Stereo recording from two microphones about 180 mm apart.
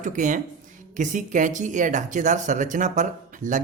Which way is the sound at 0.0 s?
45° right (ahead or behind).